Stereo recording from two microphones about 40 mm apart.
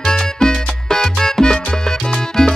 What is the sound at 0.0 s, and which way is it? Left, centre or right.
Music, centre.